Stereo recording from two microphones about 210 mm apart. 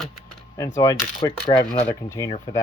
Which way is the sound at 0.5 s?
15° left (ahead or behind).